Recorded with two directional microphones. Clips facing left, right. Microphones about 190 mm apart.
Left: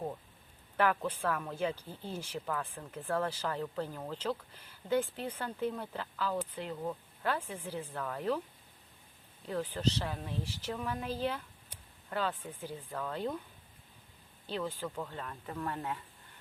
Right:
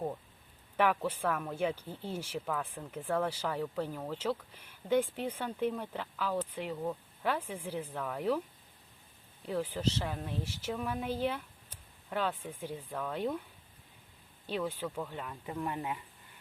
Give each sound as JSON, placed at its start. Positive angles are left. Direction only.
{"t": 0.8, "sound": "speech", "side_deg": -10}
{"t": 9.5, "sound": "speech", "side_deg": -10}
{"t": 14.4, "sound": "speech", "side_deg": -10}